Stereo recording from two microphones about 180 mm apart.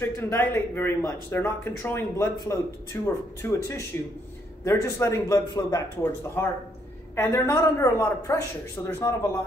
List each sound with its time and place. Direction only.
0.0 s speech: 15° left (ahead or behind)